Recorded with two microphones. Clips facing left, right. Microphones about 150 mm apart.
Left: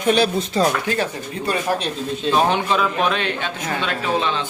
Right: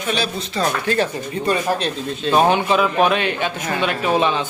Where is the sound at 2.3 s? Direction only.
5° right (ahead or behind).